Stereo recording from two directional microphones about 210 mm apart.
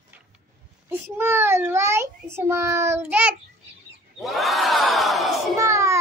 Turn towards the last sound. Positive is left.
turn(degrees=-15)  # may be behind; listen again after turning